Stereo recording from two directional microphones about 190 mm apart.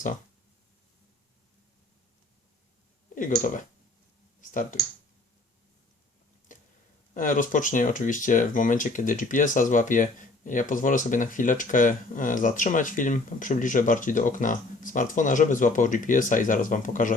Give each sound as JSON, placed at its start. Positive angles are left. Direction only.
{"t": 3.2, "sound": "speech", "side_deg": 45}
{"t": 6.5, "sound": "a sound", "side_deg": 45}
{"t": 7.1, "sound": "speech", "side_deg": 45}